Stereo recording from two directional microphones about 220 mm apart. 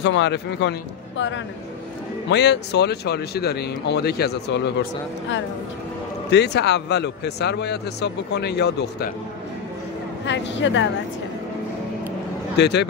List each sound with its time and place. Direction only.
0.0 s speech: 55° left (ahead or behind)
6.3 s speech: 50° left (ahead or behind)
10.2 s speech: 55° left (ahead or behind)
12.5 s speech: 50° left (ahead or behind)